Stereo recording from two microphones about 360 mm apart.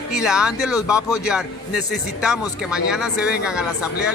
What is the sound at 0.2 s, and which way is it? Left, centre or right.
Speech, centre.